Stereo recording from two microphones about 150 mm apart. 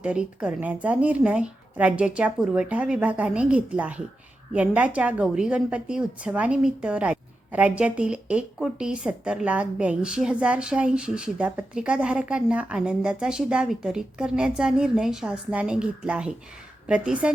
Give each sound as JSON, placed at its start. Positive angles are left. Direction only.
{"t": 0.0, "sound": "a woman's voice", "side_deg": -10}